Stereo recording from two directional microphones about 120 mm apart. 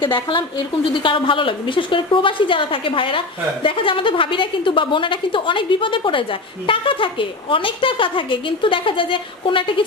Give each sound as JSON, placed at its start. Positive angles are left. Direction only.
{"t": 0.0, "sound": "a woman's voice", "side_deg": 40}